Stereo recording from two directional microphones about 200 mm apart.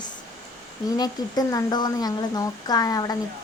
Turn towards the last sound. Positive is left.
turn(degrees=20)  # may be behind; listen again after turning